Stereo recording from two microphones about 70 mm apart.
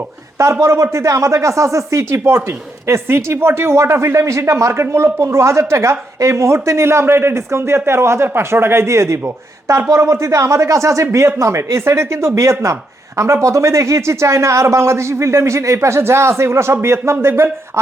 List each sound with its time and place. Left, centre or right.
0.6 s speech: right